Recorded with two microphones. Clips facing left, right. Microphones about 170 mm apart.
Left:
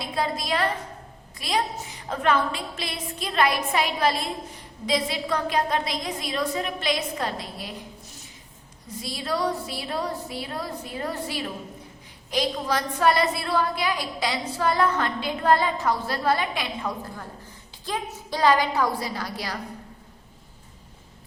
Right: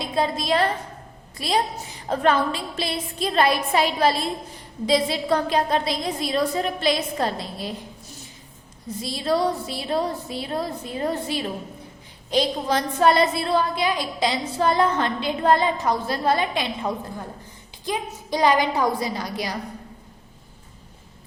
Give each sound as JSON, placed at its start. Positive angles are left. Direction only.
{"t": 0.0, "sound": "a sound", "side_deg": -25}
{"t": 1.4, "sound": "a woman's voice", "side_deg": -30}
{"t": 9.0, "sound": "a woman's voice", "side_deg": -25}